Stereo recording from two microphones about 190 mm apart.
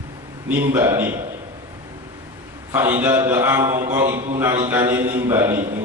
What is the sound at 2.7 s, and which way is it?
Speech, 10° right (ahead or behind).